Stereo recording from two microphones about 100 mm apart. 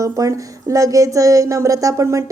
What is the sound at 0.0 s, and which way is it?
A woman's voice, 35° right (ahead or behind).